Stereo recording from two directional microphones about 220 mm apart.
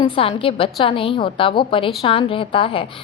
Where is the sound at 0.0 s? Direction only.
25° left (ahead or behind).